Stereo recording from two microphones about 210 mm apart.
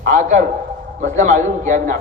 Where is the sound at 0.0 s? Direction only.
35° right (ahead or behind).